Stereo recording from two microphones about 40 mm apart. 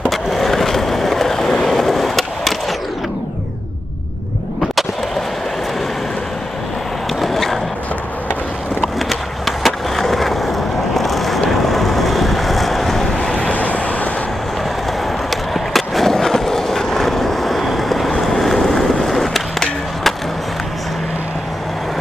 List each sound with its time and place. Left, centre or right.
0.1 s skateboard: centre
7.2 s a sound: centre
9.6 s skateboard: centre
11.0 s vehicle: centre
13.5 s vehicle: left
15.5 s skateboard: centre